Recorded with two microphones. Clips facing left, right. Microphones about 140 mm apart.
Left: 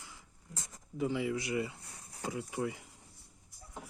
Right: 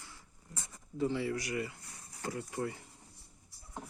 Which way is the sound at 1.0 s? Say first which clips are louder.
Even; 15° left (ahead or behind).